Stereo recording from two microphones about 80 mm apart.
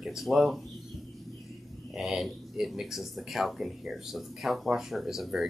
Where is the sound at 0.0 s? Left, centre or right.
Centre.